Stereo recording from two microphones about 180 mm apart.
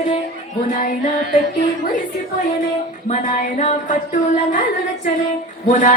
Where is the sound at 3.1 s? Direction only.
40° left (ahead or behind).